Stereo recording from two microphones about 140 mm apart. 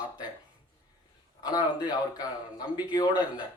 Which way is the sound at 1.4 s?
30° left (ahead or behind).